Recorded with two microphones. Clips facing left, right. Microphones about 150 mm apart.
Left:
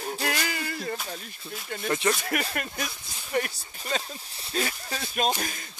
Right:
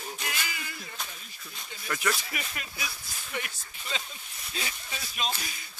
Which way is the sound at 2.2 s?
60° left (ahead or behind).